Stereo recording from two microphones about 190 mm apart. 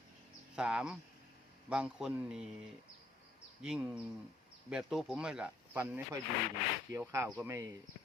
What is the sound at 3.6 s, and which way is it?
Speech, 5° right (ahead or behind).